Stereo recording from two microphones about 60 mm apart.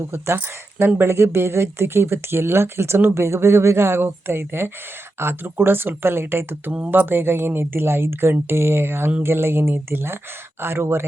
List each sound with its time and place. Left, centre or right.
0.1 s a woman's voice: right